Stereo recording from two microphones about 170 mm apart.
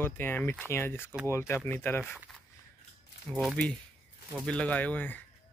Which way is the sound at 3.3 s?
Centre (ahead or behind).